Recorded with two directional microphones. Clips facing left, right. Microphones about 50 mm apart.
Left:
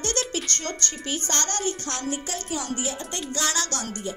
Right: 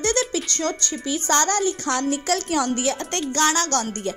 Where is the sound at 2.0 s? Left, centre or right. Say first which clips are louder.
Right 8 dB; right.